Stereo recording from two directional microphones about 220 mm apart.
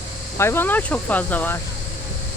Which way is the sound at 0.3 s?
10° left (ahead or behind).